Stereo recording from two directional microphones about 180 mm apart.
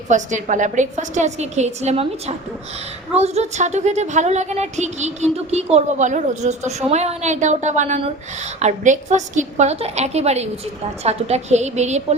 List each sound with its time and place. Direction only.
0.1 s speech: 45° right (ahead or behind)